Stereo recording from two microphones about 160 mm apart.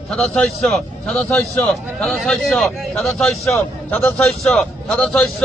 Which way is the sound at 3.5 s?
15° left (ahead or behind).